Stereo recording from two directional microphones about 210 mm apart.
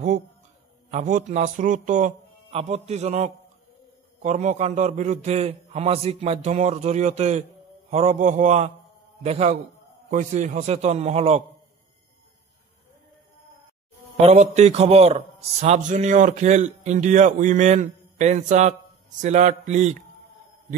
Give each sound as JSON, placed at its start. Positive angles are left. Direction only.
{"t": 0.8, "sound": "a man's voice", "side_deg": -35}
{"t": 14.2, "sound": "a man's voice", "side_deg": -35}